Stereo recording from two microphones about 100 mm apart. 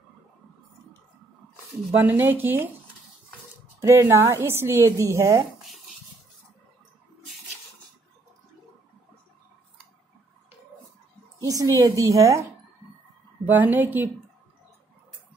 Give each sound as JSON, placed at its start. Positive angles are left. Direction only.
{"t": 2.0, "sound": "a woman's voice", "side_deg": -20}
{"t": 3.8, "sound": "a woman's voice", "side_deg": -25}
{"t": 11.3, "sound": "a woman's voice", "side_deg": -35}
{"t": 13.5, "sound": "a woman's voice", "side_deg": -20}